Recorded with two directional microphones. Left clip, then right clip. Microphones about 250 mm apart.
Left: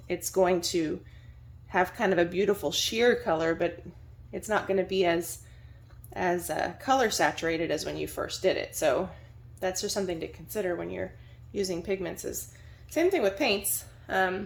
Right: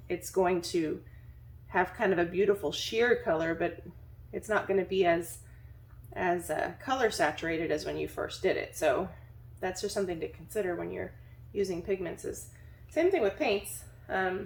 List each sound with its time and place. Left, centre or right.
0.1 s speech: left